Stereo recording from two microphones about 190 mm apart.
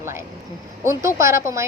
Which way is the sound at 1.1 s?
15° right (ahead or behind).